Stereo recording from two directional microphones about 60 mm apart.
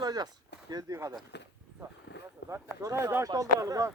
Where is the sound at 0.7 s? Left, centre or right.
Right.